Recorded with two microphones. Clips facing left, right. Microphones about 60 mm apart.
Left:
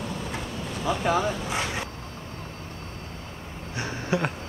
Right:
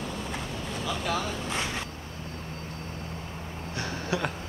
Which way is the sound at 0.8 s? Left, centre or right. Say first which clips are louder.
Left 7 dB; left.